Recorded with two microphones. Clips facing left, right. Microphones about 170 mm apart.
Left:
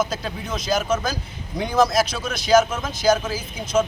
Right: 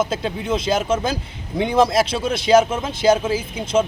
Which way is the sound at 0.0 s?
25° right (ahead or behind).